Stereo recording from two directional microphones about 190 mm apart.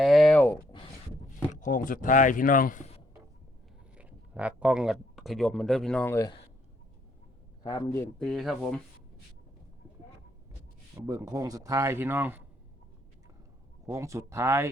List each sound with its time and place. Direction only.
0.0 s a sound: centre (ahead or behind)
1.5 s speech: 45° left (ahead or behind)
3.9 s speech: 5° right (ahead or behind); by 6.3 s 15° left (ahead or behind)
7.6 s a man's voice: 20° left (ahead or behind)
8.2 s speech: centre (ahead or behind)
11.0 s speech: 15° right (ahead or behind)
13.8 s speech: 15° right (ahead or behind)